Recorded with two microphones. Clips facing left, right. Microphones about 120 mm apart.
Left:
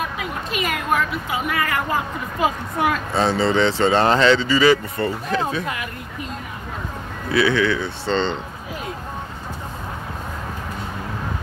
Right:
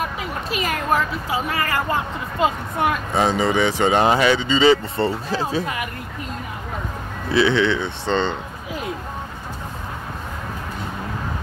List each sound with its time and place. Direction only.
0.5 s speech: 30° right (ahead or behind)
7.2 s speech: 25° right (ahead or behind)